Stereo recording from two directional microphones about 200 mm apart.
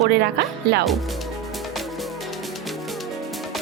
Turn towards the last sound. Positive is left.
turn(degrees=0)  # may be behind; listen again after turning